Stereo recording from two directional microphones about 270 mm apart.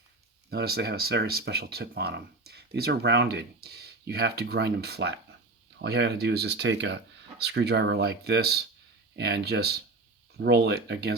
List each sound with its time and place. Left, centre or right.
0.5 s speech: right